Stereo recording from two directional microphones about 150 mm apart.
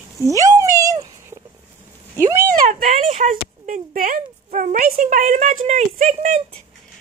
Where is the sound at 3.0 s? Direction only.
40° right (ahead or behind).